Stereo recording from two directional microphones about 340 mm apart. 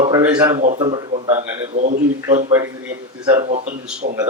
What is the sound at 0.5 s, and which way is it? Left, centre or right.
Speech, right.